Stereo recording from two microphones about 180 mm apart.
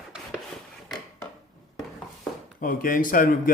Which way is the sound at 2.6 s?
50° left (ahead or behind).